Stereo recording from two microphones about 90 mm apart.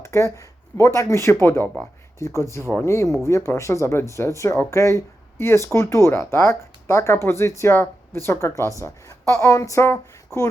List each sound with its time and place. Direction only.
0.0 s speech: 35° left (ahead or behind)